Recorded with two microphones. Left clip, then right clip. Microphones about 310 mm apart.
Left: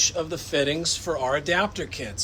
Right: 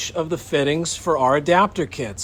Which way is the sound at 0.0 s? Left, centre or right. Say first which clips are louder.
Right 1 dB; right.